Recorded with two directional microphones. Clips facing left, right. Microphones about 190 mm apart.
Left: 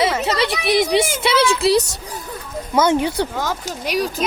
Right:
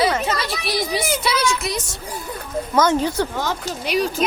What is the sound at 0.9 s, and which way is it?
Speech, 25° left (ahead or behind).